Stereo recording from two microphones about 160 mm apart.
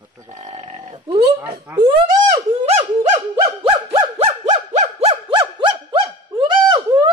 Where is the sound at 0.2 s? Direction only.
50° right (ahead or behind).